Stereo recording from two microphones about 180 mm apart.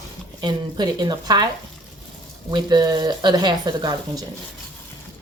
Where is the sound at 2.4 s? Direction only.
25° right (ahead or behind).